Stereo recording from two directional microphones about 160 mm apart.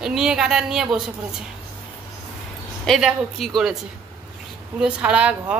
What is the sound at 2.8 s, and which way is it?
Speech, centre (ahead or behind).